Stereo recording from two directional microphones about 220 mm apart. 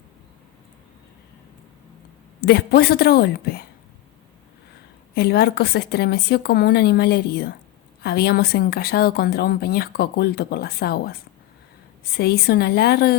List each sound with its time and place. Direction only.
2.5 s speech: 45° left (ahead or behind)
5.1 s speech: 45° left (ahead or behind)
12.1 s speech: 45° left (ahead or behind)